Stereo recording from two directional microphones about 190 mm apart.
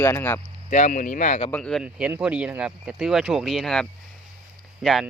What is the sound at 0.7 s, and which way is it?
Speech, 40° left (ahead or behind).